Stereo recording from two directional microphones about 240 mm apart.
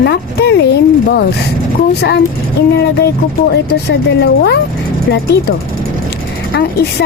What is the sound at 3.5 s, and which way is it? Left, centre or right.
Speech, left.